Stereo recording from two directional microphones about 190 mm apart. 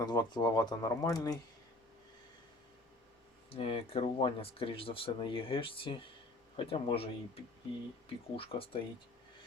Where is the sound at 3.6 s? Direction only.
30° left (ahead or behind).